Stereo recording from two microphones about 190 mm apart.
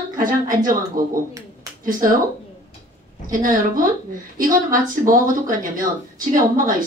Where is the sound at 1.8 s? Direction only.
45° right (ahead or behind).